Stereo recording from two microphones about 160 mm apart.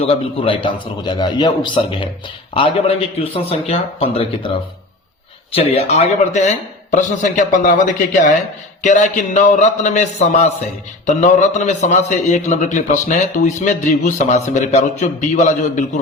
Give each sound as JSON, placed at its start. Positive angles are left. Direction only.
{"t": 0.1, "sound": "a man's voice", "side_deg": 35}